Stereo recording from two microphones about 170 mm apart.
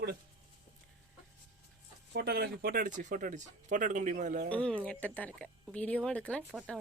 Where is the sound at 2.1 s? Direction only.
70° right (ahead or behind); by 4.5 s 45° right (ahead or behind).